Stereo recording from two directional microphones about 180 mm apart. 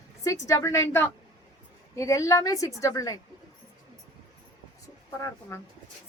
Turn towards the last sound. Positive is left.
turn(degrees=15)  # may be behind; listen again after turning